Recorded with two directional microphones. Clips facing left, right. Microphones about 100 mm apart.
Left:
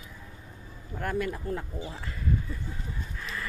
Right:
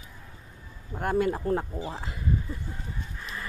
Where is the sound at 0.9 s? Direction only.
25° right (ahead or behind).